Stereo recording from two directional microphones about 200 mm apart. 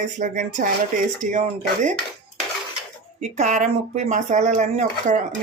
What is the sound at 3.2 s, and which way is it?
Speech, 35° right (ahead or behind).